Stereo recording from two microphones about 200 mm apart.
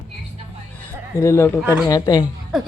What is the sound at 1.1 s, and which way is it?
A woman's voice, 15° left (ahead or behind).